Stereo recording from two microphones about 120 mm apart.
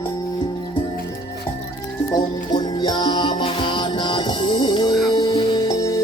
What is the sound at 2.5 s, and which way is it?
Music, 35° left (ahead or behind).